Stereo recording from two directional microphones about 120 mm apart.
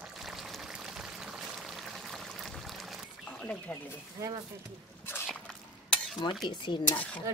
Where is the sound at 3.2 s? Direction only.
10° left (ahead or behind).